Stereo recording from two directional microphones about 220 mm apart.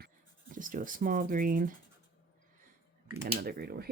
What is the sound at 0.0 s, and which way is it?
Writing, 40° right (ahead or behind).